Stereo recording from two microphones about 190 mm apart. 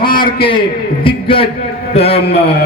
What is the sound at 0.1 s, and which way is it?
Speech, 50° left (ahead or behind).